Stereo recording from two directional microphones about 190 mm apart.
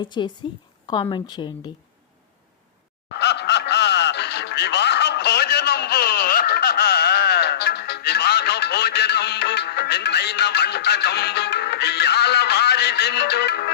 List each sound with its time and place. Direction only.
0.0 s a woman's voice: 25° left (ahead or behind)
3.2 s music: 65° left (ahead or behind)